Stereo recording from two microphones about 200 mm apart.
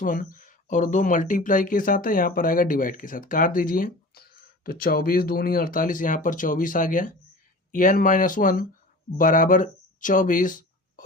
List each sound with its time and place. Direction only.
0.0 s speech: 45° left (ahead or behind)